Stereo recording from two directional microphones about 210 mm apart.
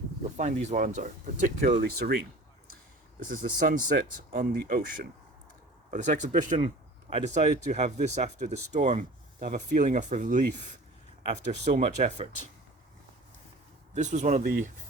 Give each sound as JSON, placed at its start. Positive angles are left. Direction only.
{"t": 0.3, "sound": "speech", "side_deg": -35}
{"t": 3.7, "sound": "speech", "side_deg": -40}
{"t": 5.9, "sound": "speech", "side_deg": -35}
{"t": 13.9, "sound": "speech", "side_deg": -35}